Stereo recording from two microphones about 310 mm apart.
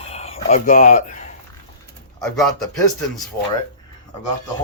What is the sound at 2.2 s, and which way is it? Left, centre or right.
Speech, centre.